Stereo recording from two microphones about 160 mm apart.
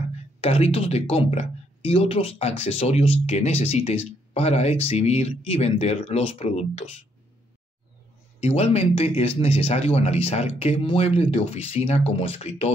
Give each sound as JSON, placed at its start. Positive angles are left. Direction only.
{"t": 0.4, "sound": "speech", "side_deg": 40}
{"t": 8.4, "sound": "speech", "side_deg": 40}